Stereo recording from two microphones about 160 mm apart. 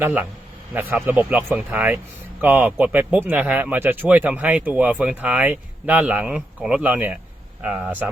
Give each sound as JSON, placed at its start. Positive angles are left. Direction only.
{"t": 0.0, "sound": "speech", "side_deg": -10}